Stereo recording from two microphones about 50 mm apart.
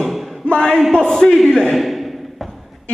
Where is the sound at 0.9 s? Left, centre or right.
Centre.